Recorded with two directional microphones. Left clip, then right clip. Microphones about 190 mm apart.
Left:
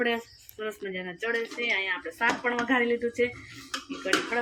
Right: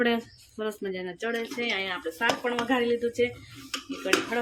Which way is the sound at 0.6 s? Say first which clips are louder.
Right 2 dB; 20° right (ahead or behind).